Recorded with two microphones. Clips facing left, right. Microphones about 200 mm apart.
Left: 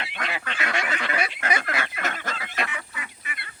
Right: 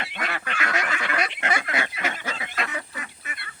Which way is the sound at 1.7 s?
15° right (ahead or behind).